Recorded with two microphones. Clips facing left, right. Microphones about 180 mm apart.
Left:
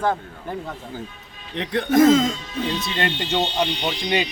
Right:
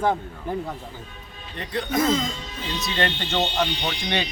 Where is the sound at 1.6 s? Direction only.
90° left.